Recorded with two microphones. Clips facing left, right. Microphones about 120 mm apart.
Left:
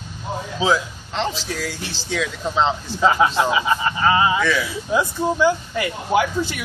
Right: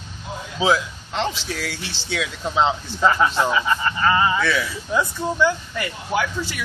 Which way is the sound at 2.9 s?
15° left (ahead or behind).